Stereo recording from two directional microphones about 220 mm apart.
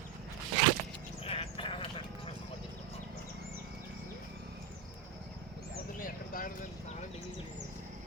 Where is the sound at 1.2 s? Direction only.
25° left (ahead or behind).